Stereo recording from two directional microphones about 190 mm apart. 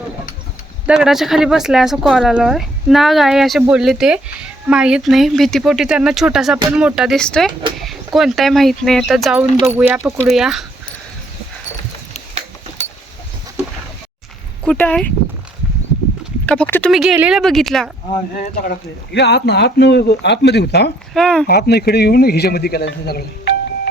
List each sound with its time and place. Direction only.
0.9 s speech: centre (ahead or behind)
14.6 s speech: 5° left (ahead or behind)
16.5 s speech: 10° left (ahead or behind)
16.9 s speech: centre (ahead or behind)
18.3 s speech: 45° left (ahead or behind)
21.1 s speech: 5° left (ahead or behind)
21.4 s speech: 55° left (ahead or behind)